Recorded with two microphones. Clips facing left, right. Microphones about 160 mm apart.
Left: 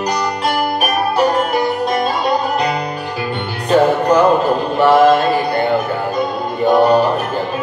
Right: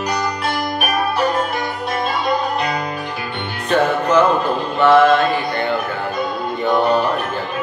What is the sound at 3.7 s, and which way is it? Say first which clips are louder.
Music: left 3 dB; 40° left (ahead or behind).